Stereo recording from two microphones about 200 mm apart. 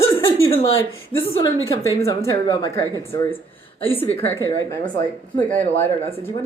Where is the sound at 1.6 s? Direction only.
15° left (ahead or behind).